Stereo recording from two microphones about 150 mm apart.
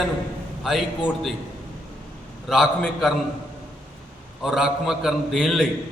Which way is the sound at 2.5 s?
Centre (ahead or behind).